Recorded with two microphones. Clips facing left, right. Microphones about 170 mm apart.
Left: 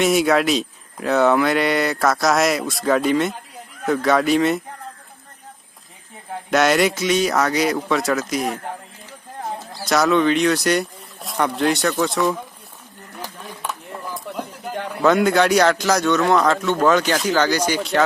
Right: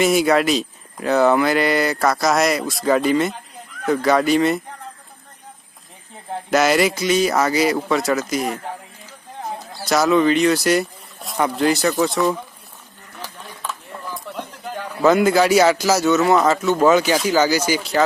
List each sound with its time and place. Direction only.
0.0 s speech: centre (ahead or behind)
6.5 s speech: centre (ahead or behind)
13.1 s a sound: 15° left (ahead or behind)
15.0 s speech: centre (ahead or behind)